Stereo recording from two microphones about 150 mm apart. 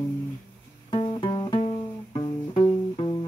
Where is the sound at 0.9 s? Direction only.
30° left (ahead or behind).